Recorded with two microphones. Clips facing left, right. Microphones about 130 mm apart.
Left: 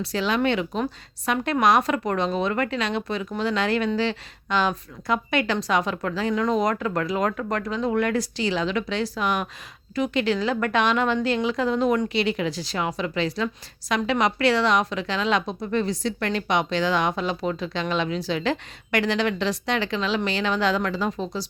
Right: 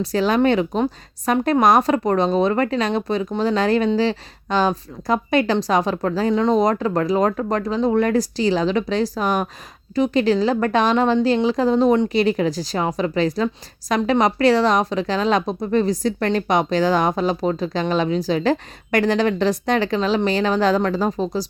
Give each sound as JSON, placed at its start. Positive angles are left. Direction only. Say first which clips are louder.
{"t": 0.0, "sound": "a woman's voice", "louder": "right 6 dB", "side_deg": -45}